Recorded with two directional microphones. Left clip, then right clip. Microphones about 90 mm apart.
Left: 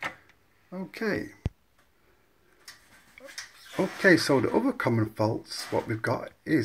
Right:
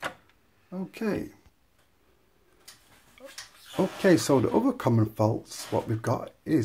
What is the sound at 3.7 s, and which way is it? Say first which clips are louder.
Speech: left 1 dB; 45° right (ahead or behind).